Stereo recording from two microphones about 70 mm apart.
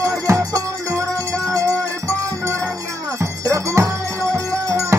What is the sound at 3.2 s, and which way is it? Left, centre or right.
Music, right.